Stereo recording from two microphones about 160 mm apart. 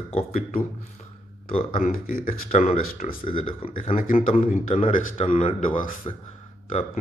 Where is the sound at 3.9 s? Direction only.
60° left (ahead or behind).